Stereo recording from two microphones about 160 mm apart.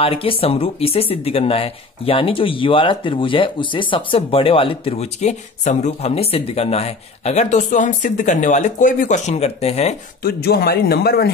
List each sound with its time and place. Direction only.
0.0 s speech: 35° left (ahead or behind)
10.2 s speech: 75° left (ahead or behind)